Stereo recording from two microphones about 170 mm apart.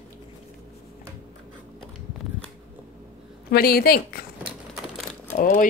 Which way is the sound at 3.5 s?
65° left (ahead or behind).